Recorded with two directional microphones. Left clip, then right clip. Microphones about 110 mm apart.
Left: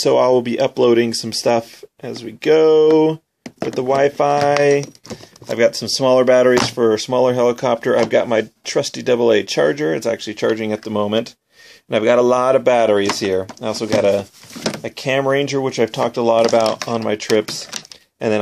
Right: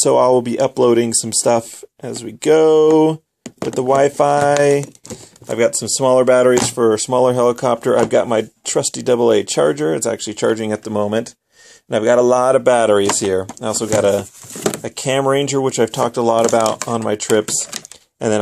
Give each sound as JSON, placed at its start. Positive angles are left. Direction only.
{"t": 0.0, "sound": "speech", "side_deg": -30}
{"t": 10.9, "sound": "speech", "side_deg": -20}
{"t": 16.6, "sound": "speech", "side_deg": -65}
{"t": 16.9, "sound": "speech", "side_deg": -40}